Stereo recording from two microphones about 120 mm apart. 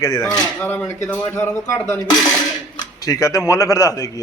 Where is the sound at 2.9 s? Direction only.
30° left (ahead or behind).